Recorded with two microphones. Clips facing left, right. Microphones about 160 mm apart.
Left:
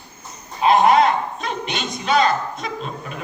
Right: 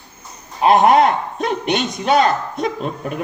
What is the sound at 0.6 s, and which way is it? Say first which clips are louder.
A man's voice: right 2 dB; 55° right (ahead or behind).